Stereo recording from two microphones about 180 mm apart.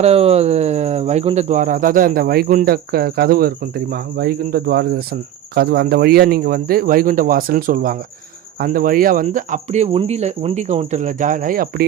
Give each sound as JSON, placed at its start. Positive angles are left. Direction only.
{"t": 0.0, "sound": "speech", "side_deg": -35}